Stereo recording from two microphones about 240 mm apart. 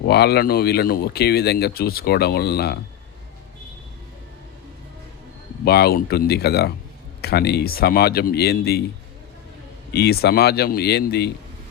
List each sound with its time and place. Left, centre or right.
0.1 s speech: left
5.6 s speech: left
9.9 s speech: left